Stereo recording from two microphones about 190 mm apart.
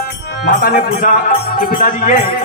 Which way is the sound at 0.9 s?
45° left (ahead or behind).